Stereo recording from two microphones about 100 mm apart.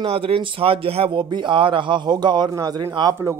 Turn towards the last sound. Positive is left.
turn(degrees=-45)  # may be behind; listen again after turning